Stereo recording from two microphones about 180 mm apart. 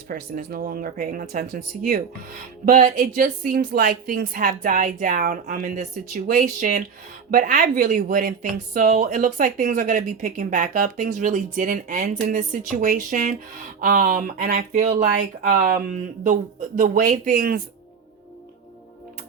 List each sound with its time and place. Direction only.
0.1 s speech: 55° right (ahead or behind)